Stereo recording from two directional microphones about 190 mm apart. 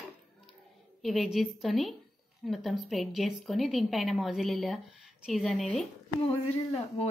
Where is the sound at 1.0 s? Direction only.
Centre (ahead or behind).